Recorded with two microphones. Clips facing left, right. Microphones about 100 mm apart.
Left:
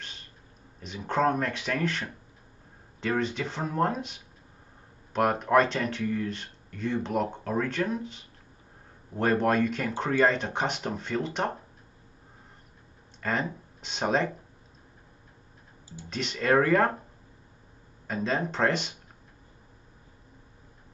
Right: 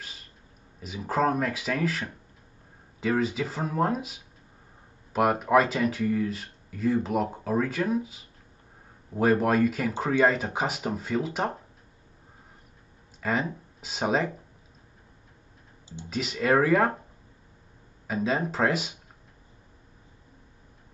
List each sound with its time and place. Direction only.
0.7 s speech: 5° right (ahead or behind)
13.2 s speech: 5° right (ahead or behind)
16.1 s speech: 5° right (ahead or behind)
18.0 s speech: 5° right (ahead or behind)